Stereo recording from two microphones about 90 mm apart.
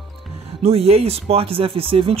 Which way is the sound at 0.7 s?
90° right.